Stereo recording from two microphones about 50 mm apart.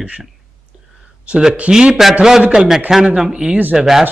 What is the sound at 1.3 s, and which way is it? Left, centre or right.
Speech, right.